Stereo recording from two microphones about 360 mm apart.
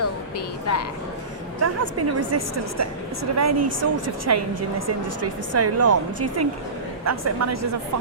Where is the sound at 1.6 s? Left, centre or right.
Right.